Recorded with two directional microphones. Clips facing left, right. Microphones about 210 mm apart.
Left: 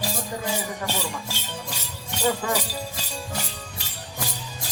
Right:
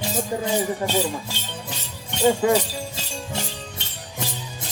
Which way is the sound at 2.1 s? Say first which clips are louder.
Right 7 dB; 25° right (ahead or behind).